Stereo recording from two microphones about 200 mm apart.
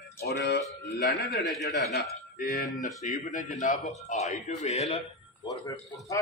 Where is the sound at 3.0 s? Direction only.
40° left (ahead or behind).